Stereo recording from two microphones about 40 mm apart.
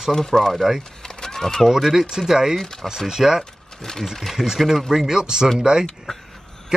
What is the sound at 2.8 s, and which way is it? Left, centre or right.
Speech, centre.